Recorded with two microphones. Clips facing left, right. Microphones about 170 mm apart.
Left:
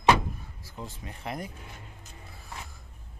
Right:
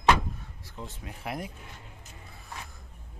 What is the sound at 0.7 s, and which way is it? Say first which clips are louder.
Speech: left 1 dB; centre (ahead or behind).